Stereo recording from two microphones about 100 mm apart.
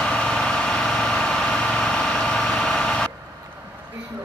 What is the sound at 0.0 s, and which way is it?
Vehicle, 10° left (ahead or behind).